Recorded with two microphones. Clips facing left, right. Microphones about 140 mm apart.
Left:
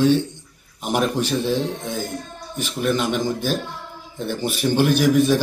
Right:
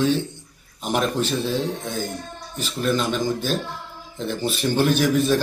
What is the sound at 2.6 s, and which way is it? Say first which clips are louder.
Speech: left 1 dB; 10° left (ahead or behind).